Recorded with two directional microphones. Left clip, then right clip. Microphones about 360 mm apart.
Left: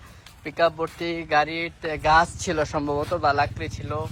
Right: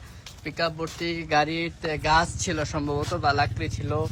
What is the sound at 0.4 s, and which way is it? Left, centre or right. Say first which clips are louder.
Speech: left 6 dB; centre.